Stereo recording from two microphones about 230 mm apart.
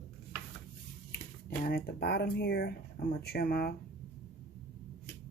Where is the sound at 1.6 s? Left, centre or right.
Left.